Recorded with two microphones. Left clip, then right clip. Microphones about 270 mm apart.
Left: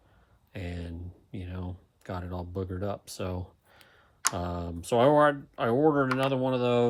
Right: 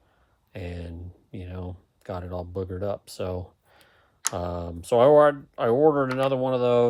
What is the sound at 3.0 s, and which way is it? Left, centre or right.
Speech, centre.